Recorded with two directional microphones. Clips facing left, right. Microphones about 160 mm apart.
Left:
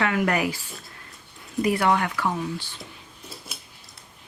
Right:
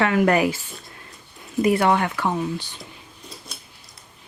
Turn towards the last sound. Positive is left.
turn(degrees=5)  # may be behind; listen again after turning